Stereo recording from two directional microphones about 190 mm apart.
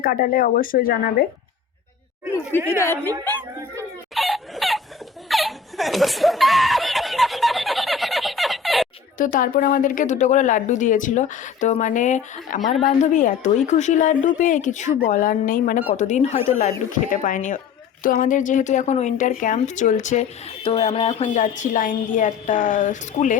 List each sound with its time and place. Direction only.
0.0 s speech: 50° left (ahead or behind)
2.6 s a woman's voice: 15° left (ahead or behind)
4.1 s chicken: centre (ahead or behind)
5.3 s snicker: centre (ahead or behind)
9.1 s speech: 45° left (ahead or behind)